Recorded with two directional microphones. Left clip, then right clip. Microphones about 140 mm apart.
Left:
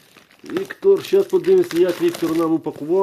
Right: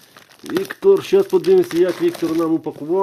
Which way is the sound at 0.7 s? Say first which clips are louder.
Right 2 dB; 30° right (ahead or behind).